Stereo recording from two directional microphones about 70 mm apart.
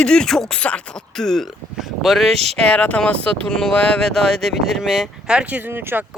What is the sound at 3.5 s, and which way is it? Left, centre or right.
Speech, centre.